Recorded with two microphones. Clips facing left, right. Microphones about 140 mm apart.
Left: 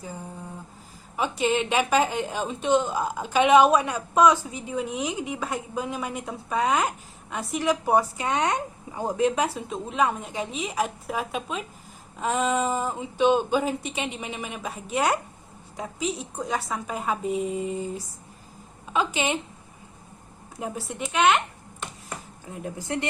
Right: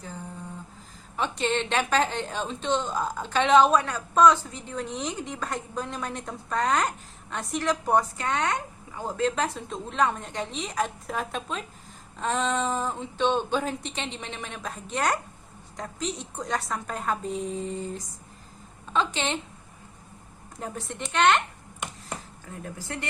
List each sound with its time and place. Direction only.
1.1 s a woman's voice: 10° left (ahead or behind)
20.6 s speech: 10° left (ahead or behind)
22.4 s speech: 20° left (ahead or behind)